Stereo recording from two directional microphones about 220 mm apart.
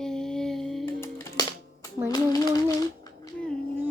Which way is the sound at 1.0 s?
15° left (ahead or behind).